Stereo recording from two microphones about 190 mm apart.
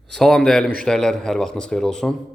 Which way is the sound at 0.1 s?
5° left (ahead or behind).